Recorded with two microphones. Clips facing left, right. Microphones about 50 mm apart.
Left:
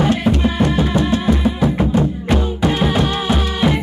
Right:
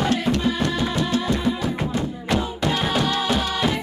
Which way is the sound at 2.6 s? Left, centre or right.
Left.